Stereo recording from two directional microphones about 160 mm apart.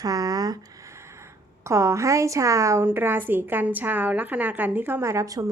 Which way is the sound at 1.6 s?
20° right (ahead or behind).